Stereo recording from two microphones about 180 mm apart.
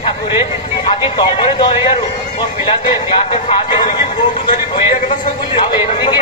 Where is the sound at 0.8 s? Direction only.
25° left (ahead or behind).